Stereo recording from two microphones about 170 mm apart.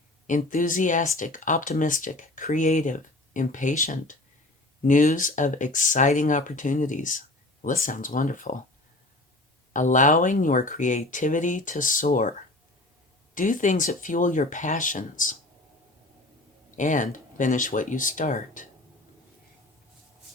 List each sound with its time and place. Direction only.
0.3 s speech: 50° left (ahead or behind)
9.7 s speech: 50° left (ahead or behind)
13.3 s speech: 50° left (ahead or behind)
16.7 s speech: 50° left (ahead or behind)